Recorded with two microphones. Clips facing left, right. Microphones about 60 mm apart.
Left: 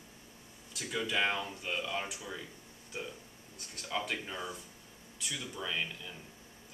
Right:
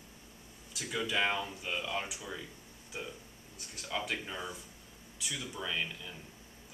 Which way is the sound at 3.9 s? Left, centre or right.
Centre.